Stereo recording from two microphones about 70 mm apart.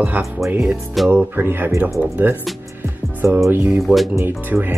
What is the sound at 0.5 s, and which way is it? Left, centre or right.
Speech, centre.